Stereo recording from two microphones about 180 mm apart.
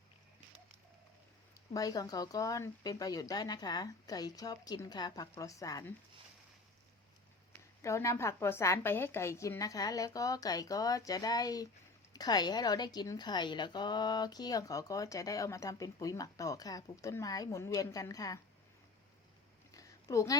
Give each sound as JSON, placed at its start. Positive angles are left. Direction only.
{"t": 1.7, "sound": "a woman's voice", "side_deg": 20}
{"t": 7.8, "sound": "a woman's voice", "side_deg": 15}
{"t": 19.7, "sound": "a sound", "side_deg": 20}